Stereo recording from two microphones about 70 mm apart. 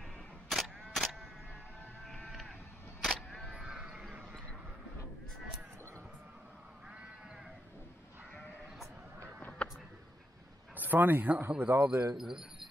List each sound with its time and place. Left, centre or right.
0.5 s single-lens reflex camera: centre
2.2 s sheep: centre
3.0 s single-lens reflex camera: centre
3.6 s a sound: centre
9.4 s a sound: centre
10.8 s speech: right
12.2 s speech: centre